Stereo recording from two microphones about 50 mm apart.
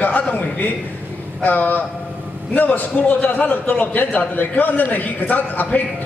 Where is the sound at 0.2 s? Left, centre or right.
Left.